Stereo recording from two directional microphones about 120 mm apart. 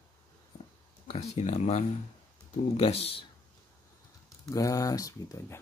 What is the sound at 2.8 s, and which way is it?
Speech, 55° left (ahead or behind).